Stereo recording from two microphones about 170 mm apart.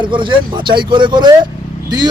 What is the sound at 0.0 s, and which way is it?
A man's voice, 30° right (ahead or behind).